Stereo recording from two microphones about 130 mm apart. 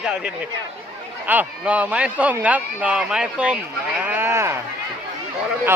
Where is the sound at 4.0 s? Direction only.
15° right (ahead or behind).